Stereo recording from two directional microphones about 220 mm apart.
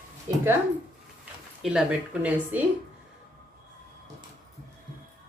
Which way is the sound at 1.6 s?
5° right (ahead or behind).